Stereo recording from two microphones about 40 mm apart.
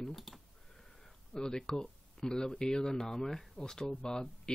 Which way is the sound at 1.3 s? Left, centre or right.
Centre.